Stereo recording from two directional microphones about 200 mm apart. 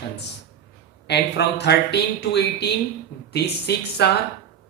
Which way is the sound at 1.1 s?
60° left (ahead or behind).